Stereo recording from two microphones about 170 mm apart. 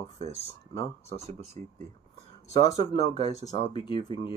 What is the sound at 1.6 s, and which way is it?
Speech, 45° right (ahead or behind).